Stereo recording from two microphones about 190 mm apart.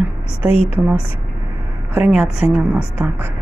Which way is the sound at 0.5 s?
30° left (ahead or behind).